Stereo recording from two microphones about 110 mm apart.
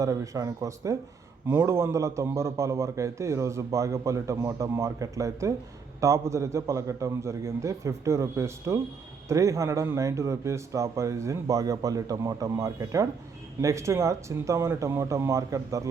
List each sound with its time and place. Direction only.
0.0 s a man's voice: 30° right (ahead or behind)